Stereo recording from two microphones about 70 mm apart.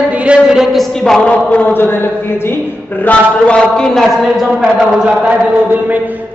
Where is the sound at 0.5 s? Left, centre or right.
Centre.